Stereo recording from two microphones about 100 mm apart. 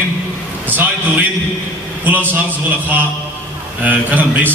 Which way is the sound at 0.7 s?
20° right (ahead or behind).